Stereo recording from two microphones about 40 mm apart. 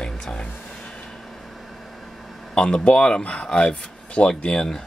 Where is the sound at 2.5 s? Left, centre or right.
Left.